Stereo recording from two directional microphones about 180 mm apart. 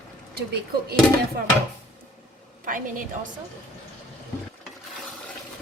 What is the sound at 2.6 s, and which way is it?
Speech, 50° right (ahead or behind).